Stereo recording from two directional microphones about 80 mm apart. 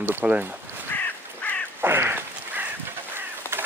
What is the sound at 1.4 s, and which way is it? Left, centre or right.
Duck, centre.